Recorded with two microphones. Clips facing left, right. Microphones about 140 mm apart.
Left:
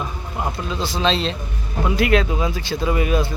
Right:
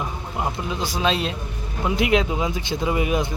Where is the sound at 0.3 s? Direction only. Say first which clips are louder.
Left 1 dB; 15° right (ahead or behind).